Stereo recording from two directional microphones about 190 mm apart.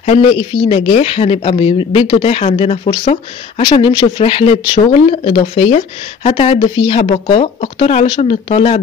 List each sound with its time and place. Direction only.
0.0 s speech: 30° left (ahead or behind)